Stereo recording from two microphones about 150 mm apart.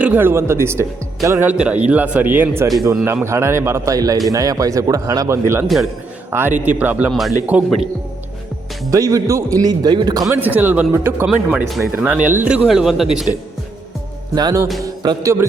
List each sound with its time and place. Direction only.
0.0 s a man's voice: 10° right (ahead or behind)
5.6 s speech: centre (ahead or behind)
7.1 s speech: centre (ahead or behind)
8.9 s a man's voice: 20° right (ahead or behind)
10.3 s speech: 10° right (ahead or behind)
14.3 s a man's voice: 25° right (ahead or behind)